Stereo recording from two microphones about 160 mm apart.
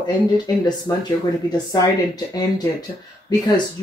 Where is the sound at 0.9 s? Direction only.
20° left (ahead or behind).